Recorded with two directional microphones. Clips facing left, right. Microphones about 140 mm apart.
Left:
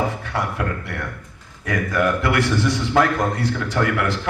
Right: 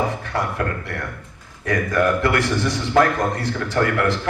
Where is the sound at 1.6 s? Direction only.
45° right (ahead or behind).